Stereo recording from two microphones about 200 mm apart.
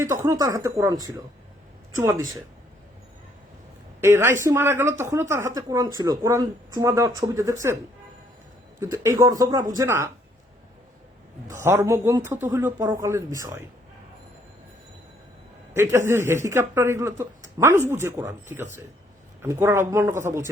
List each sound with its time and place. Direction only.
0.0 s a woman's voice: 15° right (ahead or behind)
4.0 s a woman's voice: 10° right (ahead or behind)
8.8 s a woman's voice: 15° right (ahead or behind)
11.4 s a woman's voice: 15° right (ahead or behind)
15.7 s a woman's voice: 10° right (ahead or behind)